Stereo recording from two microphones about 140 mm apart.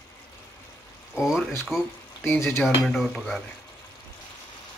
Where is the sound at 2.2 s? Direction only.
15° left (ahead or behind).